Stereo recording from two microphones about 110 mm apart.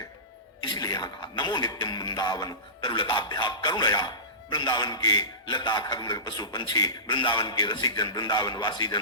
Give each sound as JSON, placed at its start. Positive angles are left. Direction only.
{"t": 0.7, "sound": "a man's voice", "side_deg": 40}